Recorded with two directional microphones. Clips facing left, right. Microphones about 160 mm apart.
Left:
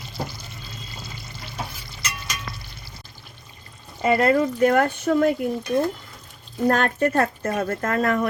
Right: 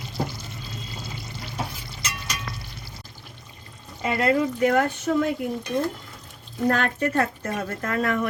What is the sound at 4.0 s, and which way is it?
Speech, 50° left (ahead or behind).